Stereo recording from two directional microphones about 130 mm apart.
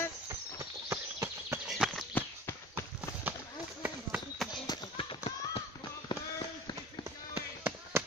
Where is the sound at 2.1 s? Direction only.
20° left (ahead or behind).